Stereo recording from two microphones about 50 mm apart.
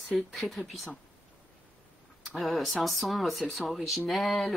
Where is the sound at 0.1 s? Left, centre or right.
Centre.